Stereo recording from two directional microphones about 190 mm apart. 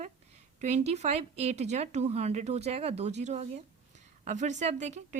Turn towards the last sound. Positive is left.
turn(degrees=-35)  # may be behind; listen again after turning